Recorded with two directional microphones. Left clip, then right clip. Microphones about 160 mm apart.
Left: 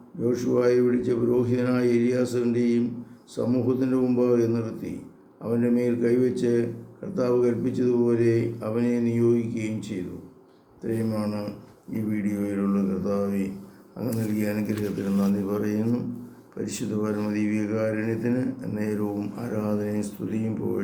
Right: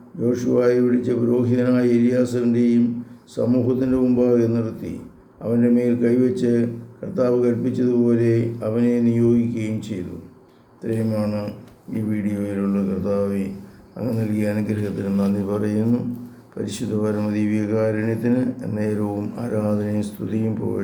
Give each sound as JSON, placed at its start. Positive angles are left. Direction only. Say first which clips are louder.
{"t": 0.2, "sound": "speech", "louder": "right 4 dB", "side_deg": -15}